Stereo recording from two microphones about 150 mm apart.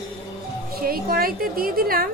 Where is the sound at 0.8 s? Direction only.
80° right.